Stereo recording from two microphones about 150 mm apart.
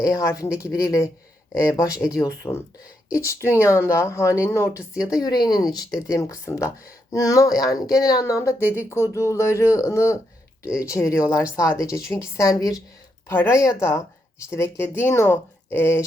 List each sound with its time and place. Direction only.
0.0 s speech: 20° left (ahead or behind)
4.7 s speech: 5° right (ahead or behind)
5.2 s speech: 25° left (ahead or behind)